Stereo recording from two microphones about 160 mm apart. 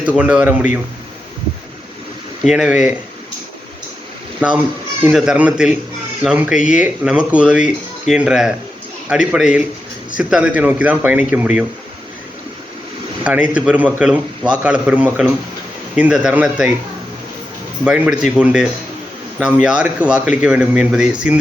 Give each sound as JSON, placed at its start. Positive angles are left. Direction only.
{"t": 0.2, "sound": "speech", "side_deg": -10}
{"t": 2.4, "sound": "speech", "side_deg": -5}
{"t": 4.4, "sound": "speech", "side_deg": -10}
{"t": 13.2, "sound": "speech", "side_deg": -5}
{"t": 17.8, "sound": "speech", "side_deg": -5}